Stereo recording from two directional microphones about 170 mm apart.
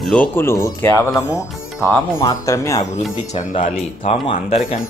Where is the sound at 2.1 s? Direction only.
20° left (ahead or behind).